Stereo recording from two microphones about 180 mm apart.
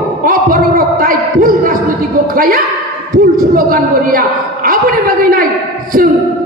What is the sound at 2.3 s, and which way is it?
A man's voice, 50° right (ahead or behind).